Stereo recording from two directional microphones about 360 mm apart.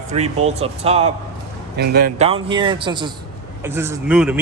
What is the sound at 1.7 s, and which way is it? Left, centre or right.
Speech, right.